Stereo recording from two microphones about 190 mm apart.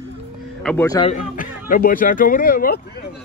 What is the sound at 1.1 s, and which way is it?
Speech, 45° left (ahead or behind).